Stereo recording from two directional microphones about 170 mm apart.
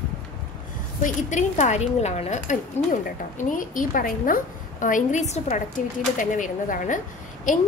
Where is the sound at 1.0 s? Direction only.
45° left (ahead or behind).